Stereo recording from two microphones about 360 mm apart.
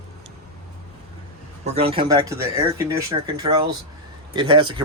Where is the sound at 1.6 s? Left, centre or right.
Centre.